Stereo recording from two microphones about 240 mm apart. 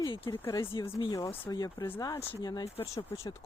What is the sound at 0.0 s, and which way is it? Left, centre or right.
Speech, centre.